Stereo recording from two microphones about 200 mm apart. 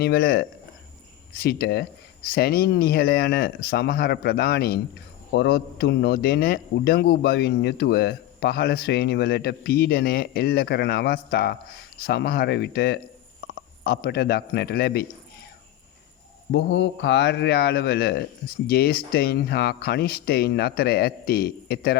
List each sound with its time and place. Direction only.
0.0 s a man's voice: 50° left (ahead or behind)
16.5 s a man's voice: 60° left (ahead or behind)